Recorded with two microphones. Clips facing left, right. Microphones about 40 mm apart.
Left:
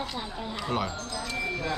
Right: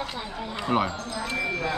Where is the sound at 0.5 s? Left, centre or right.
Right.